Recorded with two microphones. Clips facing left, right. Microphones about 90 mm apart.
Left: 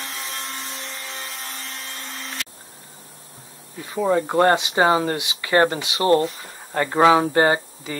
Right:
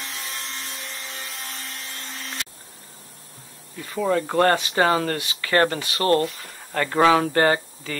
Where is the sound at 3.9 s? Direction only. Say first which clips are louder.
Left 2 dB; 15° left (ahead or behind).